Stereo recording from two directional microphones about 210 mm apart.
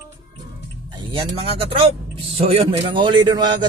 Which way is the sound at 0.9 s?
25° right (ahead or behind).